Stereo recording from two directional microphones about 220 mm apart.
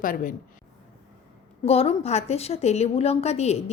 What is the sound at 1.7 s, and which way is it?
A woman's voice, 25° left (ahead or behind).